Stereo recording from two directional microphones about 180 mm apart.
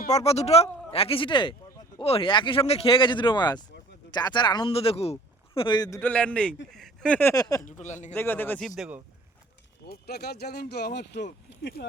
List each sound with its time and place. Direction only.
0.1 s speech: 35° left (ahead or behind)
6.0 s speech: 5° left (ahead or behind)
7.6 s a man's voice: 40° left (ahead or behind)
8.1 s speech: 10° left (ahead or behind)
9.8 s speech: 60° left (ahead or behind)